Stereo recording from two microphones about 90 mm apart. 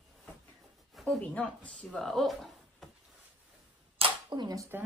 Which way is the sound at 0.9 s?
Centre (ahead or behind).